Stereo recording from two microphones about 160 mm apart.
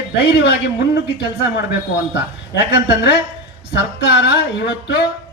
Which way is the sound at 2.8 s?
90° left.